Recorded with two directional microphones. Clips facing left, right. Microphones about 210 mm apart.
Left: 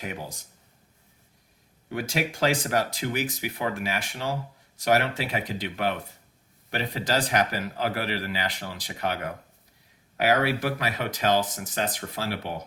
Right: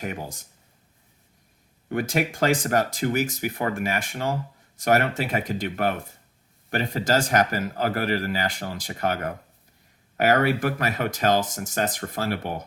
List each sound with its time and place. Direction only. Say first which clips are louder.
0.0 s a man's voice: right 3 dB; 50° right (ahead or behind)
1.9 s a man's voice: right 4 dB; 50° right (ahead or behind)